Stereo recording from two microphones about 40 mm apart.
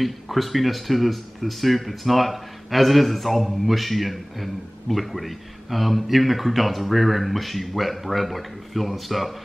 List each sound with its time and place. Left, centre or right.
0.0 s speech: centre